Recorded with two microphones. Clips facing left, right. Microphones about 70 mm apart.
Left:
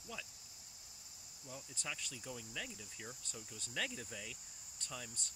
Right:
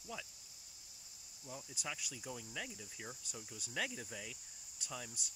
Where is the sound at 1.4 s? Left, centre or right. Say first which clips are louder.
Right 1 dB; centre.